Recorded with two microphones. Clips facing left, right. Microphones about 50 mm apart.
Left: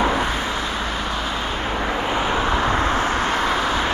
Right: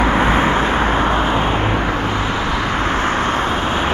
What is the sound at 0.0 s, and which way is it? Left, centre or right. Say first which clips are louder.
Vehicle: right 6 dB; right.